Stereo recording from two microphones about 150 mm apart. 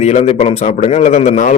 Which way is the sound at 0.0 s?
50° left (ahead or behind).